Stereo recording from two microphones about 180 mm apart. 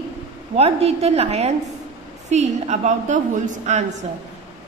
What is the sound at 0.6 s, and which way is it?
A woman's voice, 35° right (ahead or behind).